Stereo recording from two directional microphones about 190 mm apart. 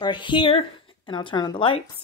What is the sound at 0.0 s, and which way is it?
Speech, 25° left (ahead or behind).